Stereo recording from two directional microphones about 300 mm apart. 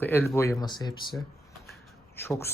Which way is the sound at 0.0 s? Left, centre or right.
Centre.